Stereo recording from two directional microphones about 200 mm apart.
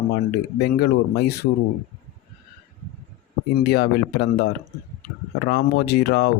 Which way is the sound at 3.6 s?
55° left (ahead or behind).